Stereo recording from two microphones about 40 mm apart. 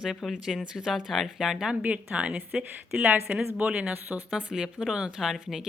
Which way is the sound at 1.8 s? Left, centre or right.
Right.